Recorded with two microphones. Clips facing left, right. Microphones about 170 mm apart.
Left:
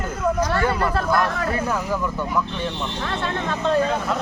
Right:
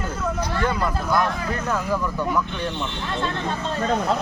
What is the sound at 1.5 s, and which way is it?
Speech, 5° left (ahead or behind).